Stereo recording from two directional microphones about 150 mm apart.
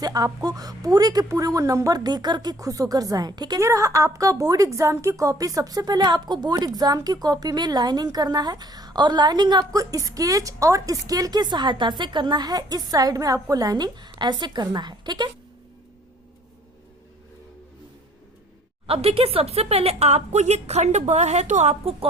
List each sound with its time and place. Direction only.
0.0 s speech: 25° right (ahead or behind)
18.9 s speech: 40° right (ahead or behind)